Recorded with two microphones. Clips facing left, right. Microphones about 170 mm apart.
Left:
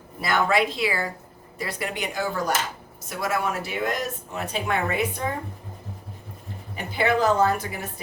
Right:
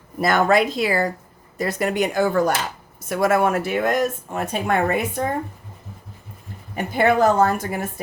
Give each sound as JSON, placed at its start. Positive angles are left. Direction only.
{"t": 0.2, "sound": "speech", "side_deg": -45}
{"t": 6.7, "sound": "speech", "side_deg": -50}